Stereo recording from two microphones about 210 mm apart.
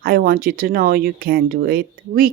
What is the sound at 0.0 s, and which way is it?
Speech, 45° right (ahead or behind).